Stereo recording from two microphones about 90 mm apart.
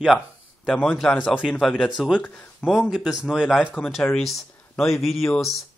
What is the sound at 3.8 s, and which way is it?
Speech, 10° left (ahead or behind).